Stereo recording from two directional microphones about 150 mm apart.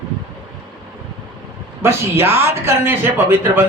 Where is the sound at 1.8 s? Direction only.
15° right (ahead or behind).